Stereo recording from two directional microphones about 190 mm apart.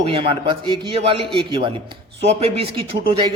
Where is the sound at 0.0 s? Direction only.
30° right (ahead or behind).